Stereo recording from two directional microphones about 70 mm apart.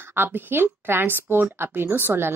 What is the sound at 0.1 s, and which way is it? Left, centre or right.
Speech, right.